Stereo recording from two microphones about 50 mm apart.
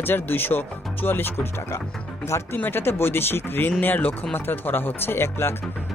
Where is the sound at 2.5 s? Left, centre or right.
Left.